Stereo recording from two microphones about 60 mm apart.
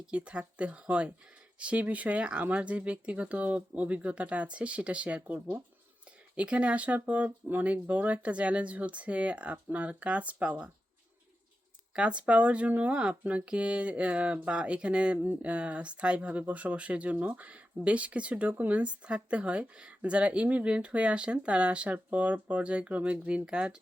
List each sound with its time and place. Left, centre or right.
0.1 s speech: centre
11.9 s speech: centre